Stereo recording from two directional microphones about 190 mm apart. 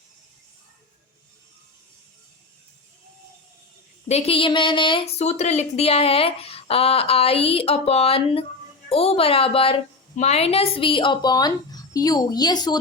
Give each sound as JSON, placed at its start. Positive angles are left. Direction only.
{"t": 4.1, "sound": "a woman's voice", "side_deg": 30}